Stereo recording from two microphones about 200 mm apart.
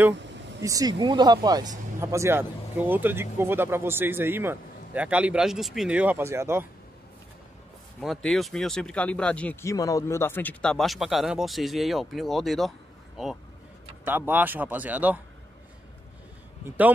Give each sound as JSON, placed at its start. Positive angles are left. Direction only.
{"t": 0.1, "sound": "a sound", "side_deg": -60}
{"t": 0.6, "sound": "speech", "side_deg": -15}
{"t": 8.0, "sound": "speech", "side_deg": 0}